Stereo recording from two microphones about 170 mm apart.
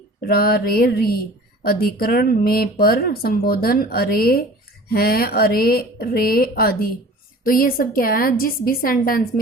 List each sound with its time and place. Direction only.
0.2 s speech: 65° left (ahead or behind)